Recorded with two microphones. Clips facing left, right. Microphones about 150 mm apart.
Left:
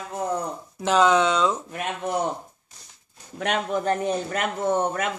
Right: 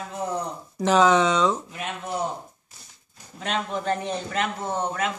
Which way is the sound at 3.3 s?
55° left (ahead or behind).